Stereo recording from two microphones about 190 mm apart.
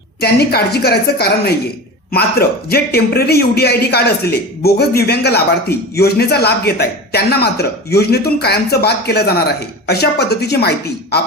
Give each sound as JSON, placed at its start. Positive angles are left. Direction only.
{"t": 0.2, "sound": "a man's voice", "side_deg": 55}
{"t": 2.6, "sound": "a man's voice", "side_deg": 55}